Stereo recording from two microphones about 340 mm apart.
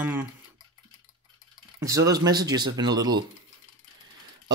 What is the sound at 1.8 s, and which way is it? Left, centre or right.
Speech, centre.